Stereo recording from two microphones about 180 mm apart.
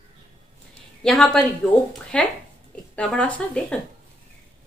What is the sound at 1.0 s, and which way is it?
A woman's voice, 5° left (ahead or behind).